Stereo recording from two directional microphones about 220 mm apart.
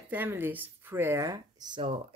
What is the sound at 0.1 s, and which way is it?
Speech, 10° right (ahead or behind).